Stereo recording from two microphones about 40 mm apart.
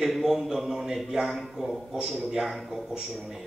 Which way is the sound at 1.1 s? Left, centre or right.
Centre.